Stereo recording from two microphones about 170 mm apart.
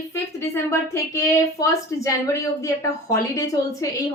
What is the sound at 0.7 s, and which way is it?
A woman's voice, 15° left (ahead or behind).